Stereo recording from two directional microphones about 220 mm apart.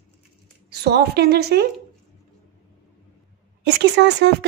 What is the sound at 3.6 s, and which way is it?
Speech, 50° right (ahead or behind).